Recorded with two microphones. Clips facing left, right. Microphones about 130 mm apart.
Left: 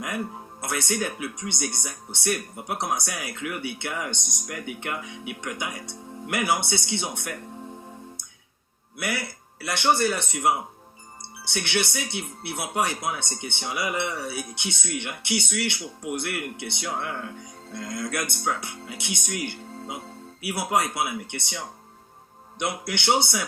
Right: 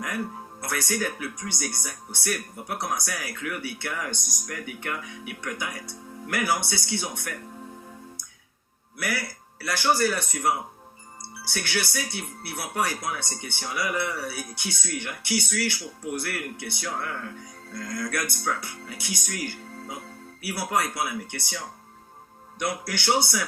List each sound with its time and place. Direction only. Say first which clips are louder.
0.6 s speech: left 1 dB; 25° left (ahead or behind)
9.0 s speech: left 1 dB; 25° left (ahead or behind)